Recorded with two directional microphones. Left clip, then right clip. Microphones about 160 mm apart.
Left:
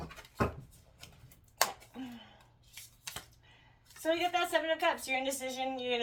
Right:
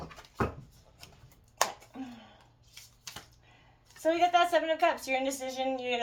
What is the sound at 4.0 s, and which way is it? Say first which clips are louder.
Speech: right 6 dB; 40° right (ahead or behind).